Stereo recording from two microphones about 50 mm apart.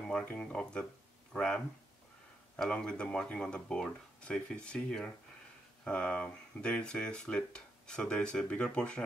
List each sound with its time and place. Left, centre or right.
0.2 s speech: left
0.6 s speech: centre
2.8 s speech: centre